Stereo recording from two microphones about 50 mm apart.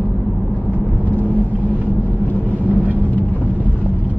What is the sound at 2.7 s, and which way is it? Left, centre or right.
Vehicle, right.